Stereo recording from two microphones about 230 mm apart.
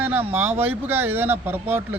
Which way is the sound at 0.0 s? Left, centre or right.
Centre.